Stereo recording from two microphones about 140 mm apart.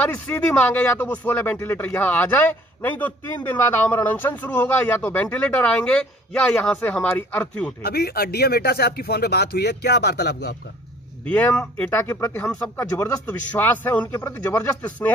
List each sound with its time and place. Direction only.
0.0 s speech: 10° left (ahead or behind)
7.8 s speech: 90° left
11.2 s speech: 10° left (ahead or behind)